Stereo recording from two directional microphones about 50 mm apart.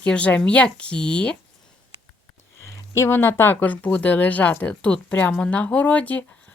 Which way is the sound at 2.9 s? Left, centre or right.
Left.